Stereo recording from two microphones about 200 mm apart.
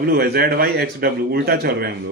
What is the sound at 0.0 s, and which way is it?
A man's voice, 50° right (ahead or behind).